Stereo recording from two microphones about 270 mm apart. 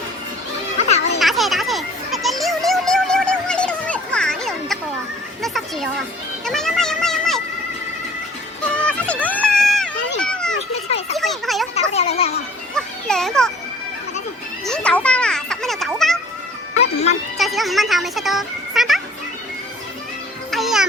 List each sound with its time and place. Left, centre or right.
0.8 s children playing: left
1.2 s children playing: centre
8.7 s a sound: centre
10.2 s children playing: centre
10.8 s a sound: left
11.2 s a sound: centre
11.7 s a sound: left
12.7 s children playing: centre
14.6 s children playing: centre
16.8 s music: left
17.3 s music: centre
20.5 s music: centre